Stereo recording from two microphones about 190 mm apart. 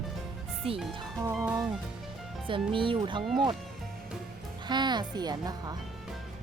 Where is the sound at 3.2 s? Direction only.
Centre (ahead or behind).